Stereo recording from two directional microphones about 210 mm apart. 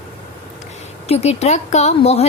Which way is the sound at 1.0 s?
30° left (ahead or behind).